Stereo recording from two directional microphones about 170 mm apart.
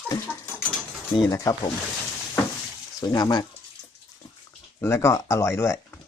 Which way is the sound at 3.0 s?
20° left (ahead or behind).